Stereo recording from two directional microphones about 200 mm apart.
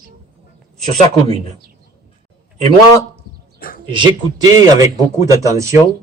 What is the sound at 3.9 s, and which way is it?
A man's voice, 25° right (ahead or behind).